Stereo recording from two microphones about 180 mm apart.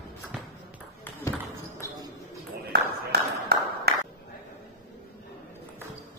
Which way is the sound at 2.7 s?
60° right (ahead or behind).